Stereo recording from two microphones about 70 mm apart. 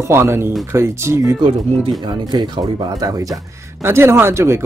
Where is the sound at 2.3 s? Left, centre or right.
Right.